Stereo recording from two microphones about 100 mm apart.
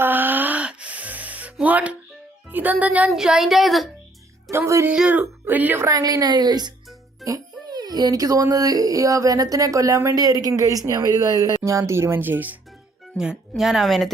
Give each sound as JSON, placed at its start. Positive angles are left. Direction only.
{"t": 0.0, "sound": "music", "side_deg": -20}
{"t": 2.5, "sound": "speech", "side_deg": -20}
{"t": 3.1, "sound": "speech", "side_deg": -5}
{"t": 4.5, "sound": "speech", "side_deg": -30}
{"t": 4.9, "sound": "speech", "side_deg": -15}
{"t": 5.8, "sound": "a child's voice", "side_deg": -35}
{"t": 13.6, "sound": "speech", "side_deg": 0}